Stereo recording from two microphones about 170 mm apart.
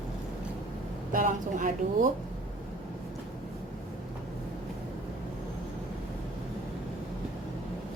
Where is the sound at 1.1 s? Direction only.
55° right (ahead or behind).